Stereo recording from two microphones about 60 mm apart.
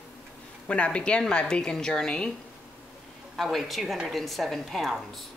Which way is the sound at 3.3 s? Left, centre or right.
Centre.